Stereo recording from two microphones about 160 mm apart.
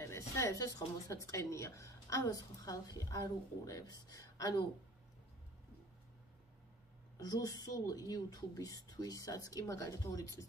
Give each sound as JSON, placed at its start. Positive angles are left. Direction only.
{"t": 0.0, "sound": "a woman's voice", "side_deg": 20}
{"t": 7.2, "sound": "a woman's voice", "side_deg": 25}